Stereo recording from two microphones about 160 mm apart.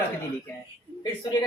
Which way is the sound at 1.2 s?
25° left (ahead or behind).